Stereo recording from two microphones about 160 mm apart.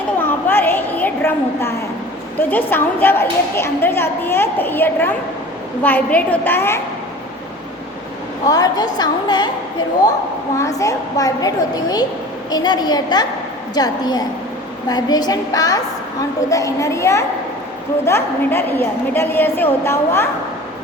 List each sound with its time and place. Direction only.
0.2 s a sound: 10° left (ahead or behind)
2.5 s a woman's voice: 10° left (ahead or behind)
8.4 s a woman's voice: 25° left (ahead or behind)
10.6 s a woman's voice: 20° left (ahead or behind)